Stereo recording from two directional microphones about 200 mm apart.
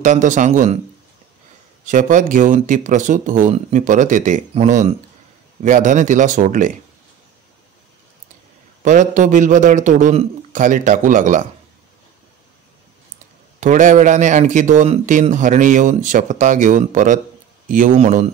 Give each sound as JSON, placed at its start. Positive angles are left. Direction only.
{"t": 0.0, "sound": "speech", "side_deg": -40}
{"t": 1.9, "sound": "speech", "side_deg": -40}
{"t": 8.8, "sound": "speech", "side_deg": -40}
{"t": 13.6, "sound": "speech", "side_deg": -40}